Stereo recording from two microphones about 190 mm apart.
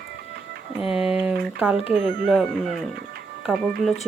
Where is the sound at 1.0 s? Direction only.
5° right (ahead or behind).